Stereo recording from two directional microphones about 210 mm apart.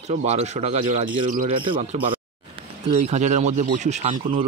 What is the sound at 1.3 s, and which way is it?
Speech, 35° right (ahead or behind).